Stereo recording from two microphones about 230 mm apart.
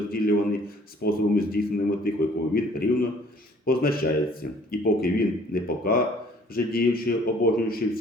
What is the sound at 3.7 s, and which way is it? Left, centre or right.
Speech, left.